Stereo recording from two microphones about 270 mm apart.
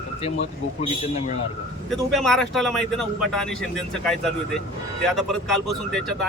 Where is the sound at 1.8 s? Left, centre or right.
Centre.